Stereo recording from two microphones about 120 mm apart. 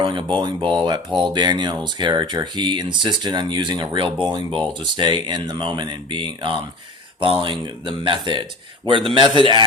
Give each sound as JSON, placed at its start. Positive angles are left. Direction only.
{"t": 0.0, "sound": "a man's voice", "side_deg": -40}